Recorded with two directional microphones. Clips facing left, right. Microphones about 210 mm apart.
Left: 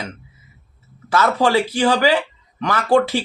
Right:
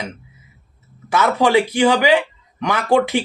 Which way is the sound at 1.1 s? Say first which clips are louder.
Right 1 dB; 20° right (ahead or behind).